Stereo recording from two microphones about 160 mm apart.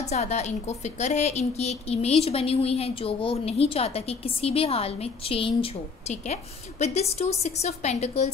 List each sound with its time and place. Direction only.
0.1 s a woman's voice: 45° left (ahead or behind)